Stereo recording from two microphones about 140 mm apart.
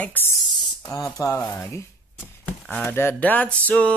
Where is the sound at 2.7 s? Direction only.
15° left (ahead or behind).